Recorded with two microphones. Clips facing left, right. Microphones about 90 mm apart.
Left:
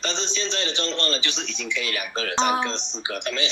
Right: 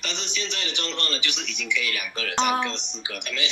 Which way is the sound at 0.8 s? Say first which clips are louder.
Left 4 dB; 25° left (ahead or behind).